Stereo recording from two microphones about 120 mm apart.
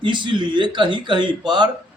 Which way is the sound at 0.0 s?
40° right (ahead or behind).